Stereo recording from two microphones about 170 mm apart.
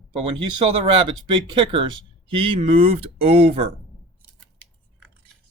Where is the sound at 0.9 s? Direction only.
30° right (ahead or behind).